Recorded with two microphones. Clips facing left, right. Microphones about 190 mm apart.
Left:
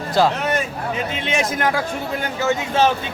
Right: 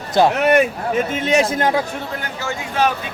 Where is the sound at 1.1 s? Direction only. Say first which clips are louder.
Right 6 dB; 40° right (ahead or behind).